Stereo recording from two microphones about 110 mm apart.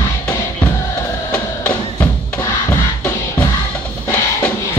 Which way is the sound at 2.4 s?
25° left (ahead or behind).